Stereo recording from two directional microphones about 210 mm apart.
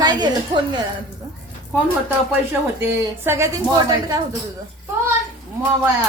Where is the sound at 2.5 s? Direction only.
10° right (ahead or behind).